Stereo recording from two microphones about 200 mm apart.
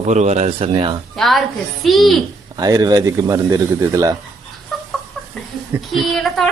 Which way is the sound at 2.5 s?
20° right (ahead or behind).